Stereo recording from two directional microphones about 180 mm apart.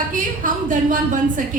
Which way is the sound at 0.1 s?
45° right (ahead or behind).